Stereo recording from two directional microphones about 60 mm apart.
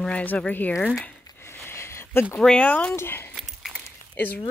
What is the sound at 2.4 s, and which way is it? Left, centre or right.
Speech, centre.